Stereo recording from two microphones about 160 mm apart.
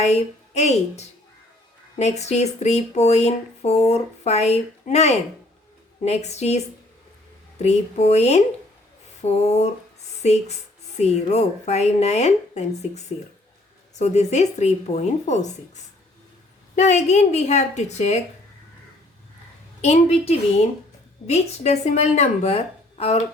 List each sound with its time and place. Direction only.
0.0 s a woman's voice: 45° left (ahead or behind)
7.6 s speech: 45° left (ahead or behind)
19.8 s speech: 40° left (ahead or behind)